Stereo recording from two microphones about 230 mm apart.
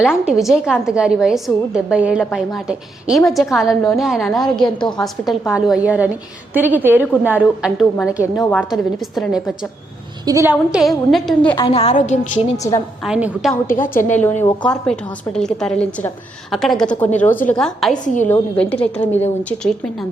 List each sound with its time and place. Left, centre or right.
0.0 s a woman's voice: centre
10.2 s a woman's voice: centre
11.5 s a woman's voice: left
12.7 s a woman's voice: centre
13.1 s a woman's voice: centre
13.7 s a woman's voice: centre
18.0 s a woman's voice: left
18.3 s a woman's voice: centre